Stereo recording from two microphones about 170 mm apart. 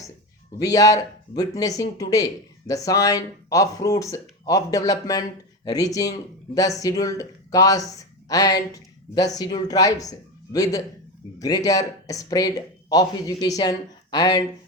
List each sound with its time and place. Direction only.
0.6 s speech: 20° left (ahead or behind)